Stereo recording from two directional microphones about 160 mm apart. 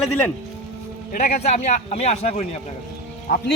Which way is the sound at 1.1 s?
60° left (ahead or behind).